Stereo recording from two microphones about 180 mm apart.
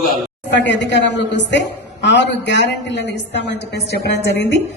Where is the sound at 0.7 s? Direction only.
80° left.